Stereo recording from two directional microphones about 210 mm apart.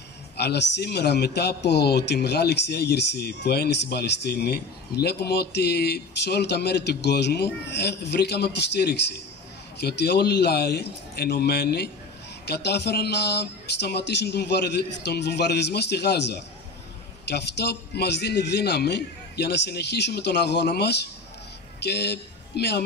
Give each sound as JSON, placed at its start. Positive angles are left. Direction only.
{"t": 0.4, "sound": "a man's voice", "side_deg": 50}